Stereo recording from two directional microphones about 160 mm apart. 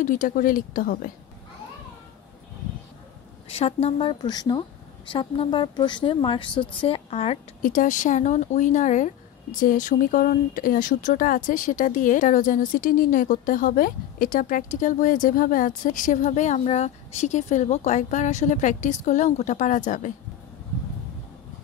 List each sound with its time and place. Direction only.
0.0 s speech: 55° left (ahead or behind)
3.4 s a woman's voice: 40° left (ahead or behind)
7.6 s speech: 55° left (ahead or behind)